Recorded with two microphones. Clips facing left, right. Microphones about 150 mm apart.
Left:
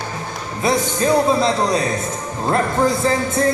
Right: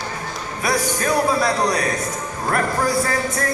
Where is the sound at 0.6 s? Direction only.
25° left (ahead or behind).